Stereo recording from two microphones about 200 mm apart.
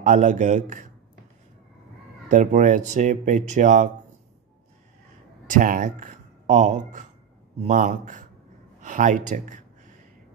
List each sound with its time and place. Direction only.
0.0 s speech: 35° right (ahead or behind)
2.2 s speech: 40° right (ahead or behind)
5.5 s speech: 40° right (ahead or behind)